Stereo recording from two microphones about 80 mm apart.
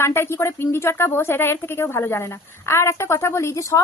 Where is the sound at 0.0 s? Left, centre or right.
Left.